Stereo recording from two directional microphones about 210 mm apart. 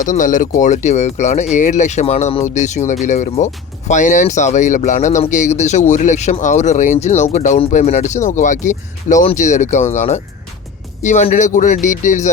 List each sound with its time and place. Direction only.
0.0 s speech: 40° left (ahead or behind)